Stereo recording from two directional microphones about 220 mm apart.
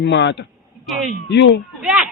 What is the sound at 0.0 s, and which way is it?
Speech, 50° left (ahead or behind).